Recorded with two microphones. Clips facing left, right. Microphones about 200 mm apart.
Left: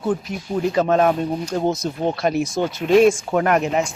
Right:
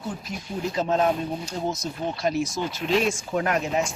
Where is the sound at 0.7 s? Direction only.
65° left (ahead or behind).